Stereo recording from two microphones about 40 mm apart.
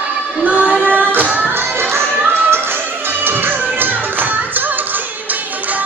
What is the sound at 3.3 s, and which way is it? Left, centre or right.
Music, right.